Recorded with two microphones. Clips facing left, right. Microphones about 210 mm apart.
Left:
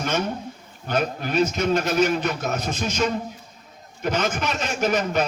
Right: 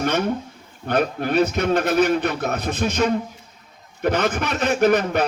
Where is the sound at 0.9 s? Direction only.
55° right (ahead or behind).